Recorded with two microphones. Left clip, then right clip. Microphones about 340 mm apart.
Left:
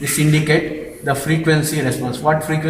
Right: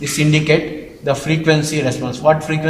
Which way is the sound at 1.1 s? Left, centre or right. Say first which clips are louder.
Right 2 dB; centre.